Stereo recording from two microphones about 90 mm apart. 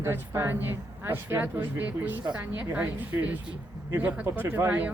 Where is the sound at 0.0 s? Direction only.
25° right (ahead or behind).